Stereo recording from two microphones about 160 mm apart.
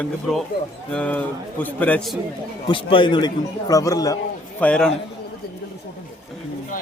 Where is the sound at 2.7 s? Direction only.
30° left (ahead or behind).